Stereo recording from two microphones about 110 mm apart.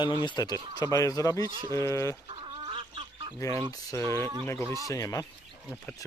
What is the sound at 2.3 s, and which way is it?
Gargling, 50° right (ahead or behind).